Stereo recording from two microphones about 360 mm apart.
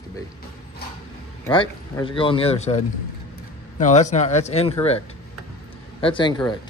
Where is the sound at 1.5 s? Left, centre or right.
Centre.